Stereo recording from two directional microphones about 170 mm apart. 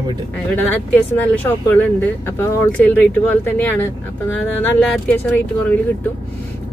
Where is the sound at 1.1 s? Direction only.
10° left (ahead or behind).